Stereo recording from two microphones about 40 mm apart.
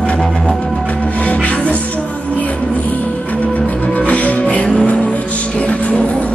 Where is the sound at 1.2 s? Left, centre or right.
Left.